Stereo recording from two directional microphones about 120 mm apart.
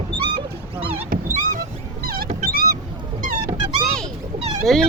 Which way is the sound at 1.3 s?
90° right.